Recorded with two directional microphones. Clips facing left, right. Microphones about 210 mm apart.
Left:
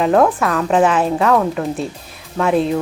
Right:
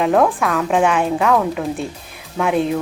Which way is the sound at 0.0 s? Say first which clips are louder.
Left 2 dB; centre (ahead or behind).